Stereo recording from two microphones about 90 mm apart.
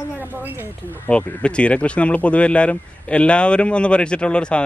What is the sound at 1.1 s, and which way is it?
Speech, 10° left (ahead or behind).